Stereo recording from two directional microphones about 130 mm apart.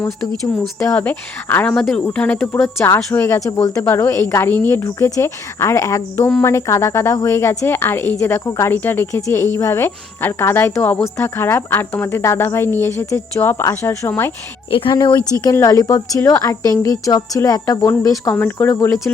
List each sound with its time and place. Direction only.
0.8 s a woman's voice: 15° left (ahead or behind)
14.7 s speech: 45° left (ahead or behind)
14.9 s a woman's voice: 30° left (ahead or behind)